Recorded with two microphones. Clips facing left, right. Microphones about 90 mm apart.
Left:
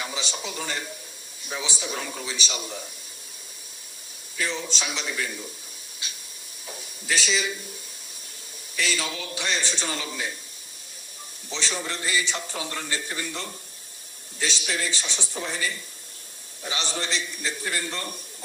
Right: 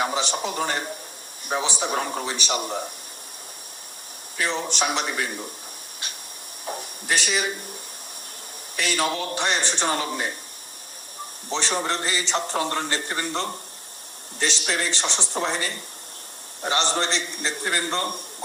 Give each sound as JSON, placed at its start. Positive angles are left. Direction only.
{"t": 0.0, "sound": "a man's voice", "side_deg": -55}
{"t": 4.4, "sound": "a man's voice", "side_deg": -60}
{"t": 6.0, "sound": "hiss", "side_deg": -55}
{"t": 6.7, "sound": "a sound", "side_deg": -55}
{"t": 8.7, "sound": "a man's voice", "side_deg": -55}
{"t": 11.4, "sound": "a man's voice", "side_deg": -60}